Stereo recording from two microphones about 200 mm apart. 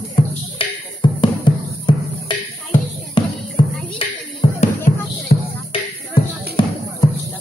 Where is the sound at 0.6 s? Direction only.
25° left (ahead or behind).